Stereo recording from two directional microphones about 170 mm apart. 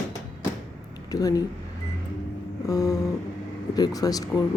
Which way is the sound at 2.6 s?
20° left (ahead or behind).